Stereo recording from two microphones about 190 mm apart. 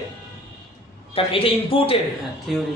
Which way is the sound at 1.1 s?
30° left (ahead or behind).